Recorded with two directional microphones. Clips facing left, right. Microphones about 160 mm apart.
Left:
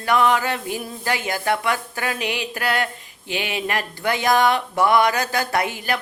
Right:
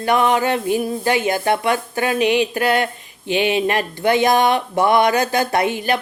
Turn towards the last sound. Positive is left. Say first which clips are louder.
# right 4 dB
turn(degrees=-25)  # may be behind; listen again after turning